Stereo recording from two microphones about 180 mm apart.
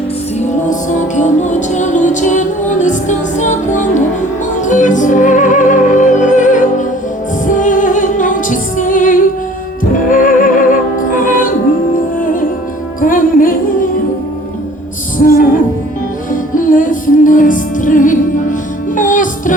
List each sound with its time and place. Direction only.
0.3 s music: 45° left (ahead or behind)
15.2 s music: 50° left (ahead or behind)